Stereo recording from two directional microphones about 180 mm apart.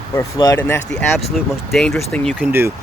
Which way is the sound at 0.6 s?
10° left (ahead or behind).